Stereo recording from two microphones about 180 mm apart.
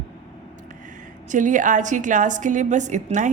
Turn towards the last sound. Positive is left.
turn(degrees=-45)  # may be behind; listen again after turning